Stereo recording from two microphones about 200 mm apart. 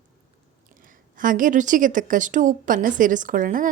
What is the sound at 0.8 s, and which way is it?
A woman's voice, 45° right (ahead or behind).